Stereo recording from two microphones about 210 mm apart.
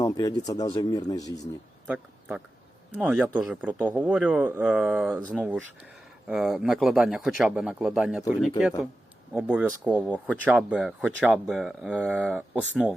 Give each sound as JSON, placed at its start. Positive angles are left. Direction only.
{"t": 0.0, "sound": "speech", "side_deg": 15}
{"t": 1.9, "sound": "a man's voice", "side_deg": -5}